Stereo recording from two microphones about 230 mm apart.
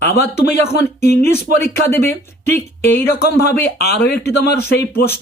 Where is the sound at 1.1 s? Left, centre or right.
Left.